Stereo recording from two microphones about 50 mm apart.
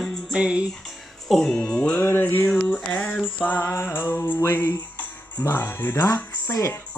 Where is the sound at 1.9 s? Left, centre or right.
Left.